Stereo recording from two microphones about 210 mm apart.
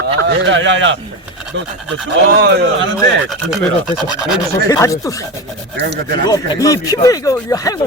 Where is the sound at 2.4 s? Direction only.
50° right (ahead or behind).